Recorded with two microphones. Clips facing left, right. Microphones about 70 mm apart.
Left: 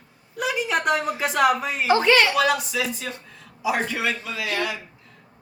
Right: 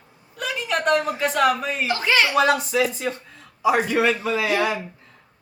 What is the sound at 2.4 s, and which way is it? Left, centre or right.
Speech, right.